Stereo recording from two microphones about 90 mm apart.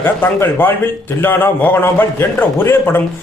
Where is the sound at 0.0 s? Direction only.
20° left (ahead or behind).